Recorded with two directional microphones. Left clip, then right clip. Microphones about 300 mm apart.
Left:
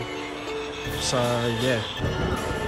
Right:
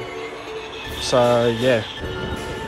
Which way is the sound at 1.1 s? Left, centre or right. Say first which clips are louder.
Right 9 dB; centre.